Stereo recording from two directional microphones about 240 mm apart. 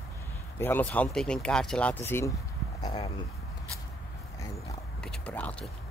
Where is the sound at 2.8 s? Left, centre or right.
Left.